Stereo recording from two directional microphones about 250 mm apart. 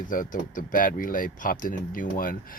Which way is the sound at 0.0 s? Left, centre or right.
Left.